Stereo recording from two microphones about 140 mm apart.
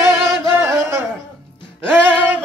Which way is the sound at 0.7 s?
15° right (ahead or behind).